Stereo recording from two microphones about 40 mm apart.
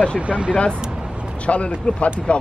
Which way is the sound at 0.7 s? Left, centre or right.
Centre.